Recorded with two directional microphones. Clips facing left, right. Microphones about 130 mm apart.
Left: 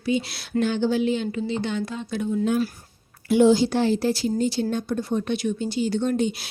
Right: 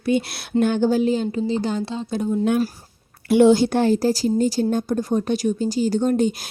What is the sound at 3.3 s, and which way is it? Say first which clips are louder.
Speech: right 3 dB; 60° right (ahead or behind).